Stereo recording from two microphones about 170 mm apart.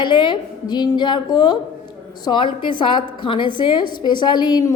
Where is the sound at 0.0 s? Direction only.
25° left (ahead or behind).